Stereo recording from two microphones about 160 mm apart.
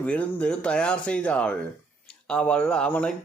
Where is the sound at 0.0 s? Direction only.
10° left (ahead or behind).